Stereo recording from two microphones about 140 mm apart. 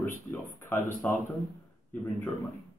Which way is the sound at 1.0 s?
10° left (ahead or behind).